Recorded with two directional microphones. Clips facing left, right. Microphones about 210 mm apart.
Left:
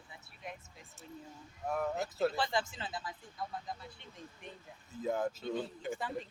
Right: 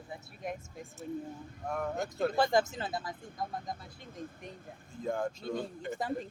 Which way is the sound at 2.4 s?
45° right (ahead or behind).